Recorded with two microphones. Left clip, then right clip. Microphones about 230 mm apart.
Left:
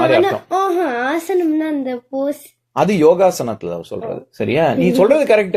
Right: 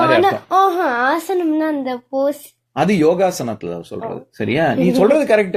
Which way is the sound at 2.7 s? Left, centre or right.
Centre.